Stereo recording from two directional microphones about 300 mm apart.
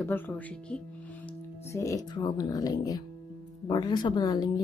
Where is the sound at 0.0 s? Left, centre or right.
Centre.